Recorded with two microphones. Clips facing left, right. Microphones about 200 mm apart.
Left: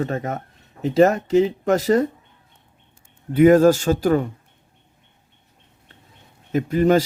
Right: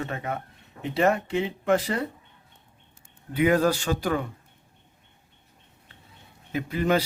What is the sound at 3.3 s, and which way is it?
Speech, 45° left (ahead or behind).